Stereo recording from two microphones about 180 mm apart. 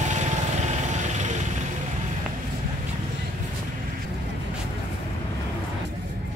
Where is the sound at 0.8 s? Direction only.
40° right (ahead or behind).